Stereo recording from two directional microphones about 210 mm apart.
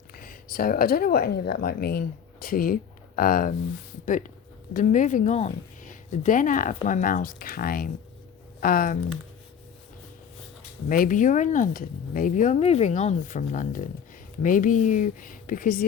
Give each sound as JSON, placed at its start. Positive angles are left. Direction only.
{"t": 0.1, "sound": "a woman's voice", "side_deg": 45}
{"t": 10.8, "sound": "speech", "side_deg": 40}